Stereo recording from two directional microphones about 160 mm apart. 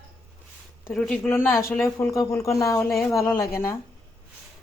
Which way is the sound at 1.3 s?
15° left (ahead or behind).